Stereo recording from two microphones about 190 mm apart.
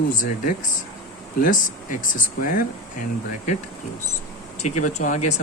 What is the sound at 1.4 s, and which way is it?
Speech, 45° left (ahead or behind).